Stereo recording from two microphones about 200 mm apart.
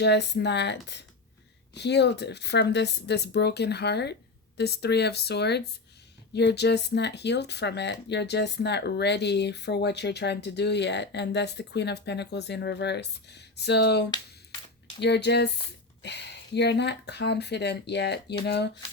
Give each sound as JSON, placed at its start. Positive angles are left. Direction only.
{"t": 0.0, "sound": "speech", "side_deg": 60}